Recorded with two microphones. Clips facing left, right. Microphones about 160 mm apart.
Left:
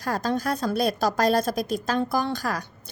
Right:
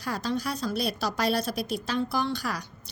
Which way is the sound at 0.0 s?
45° left (ahead or behind).